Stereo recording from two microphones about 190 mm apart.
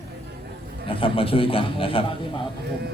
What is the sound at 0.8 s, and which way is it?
A man's voice, 30° left (ahead or behind).